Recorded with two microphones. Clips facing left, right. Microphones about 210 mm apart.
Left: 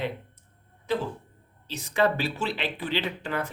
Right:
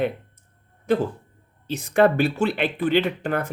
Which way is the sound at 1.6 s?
50° right (ahead or behind).